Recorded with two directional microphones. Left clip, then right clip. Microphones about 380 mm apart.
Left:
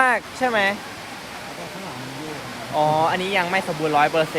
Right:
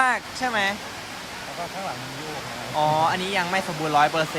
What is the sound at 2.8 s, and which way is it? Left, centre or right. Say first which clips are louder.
Speech: left 2 dB; centre.